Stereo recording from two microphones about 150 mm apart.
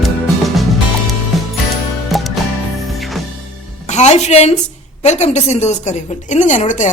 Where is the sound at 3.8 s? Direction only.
50° left (ahead or behind).